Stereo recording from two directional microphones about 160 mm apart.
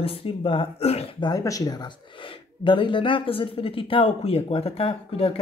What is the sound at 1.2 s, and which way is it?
Speech, 20° left (ahead or behind).